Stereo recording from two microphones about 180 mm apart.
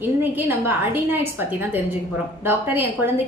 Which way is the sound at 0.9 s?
10° right (ahead or behind).